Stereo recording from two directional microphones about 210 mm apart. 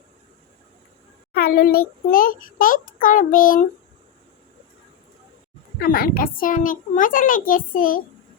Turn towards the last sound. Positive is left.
turn(degrees=40)  # may be behind; listen again after turning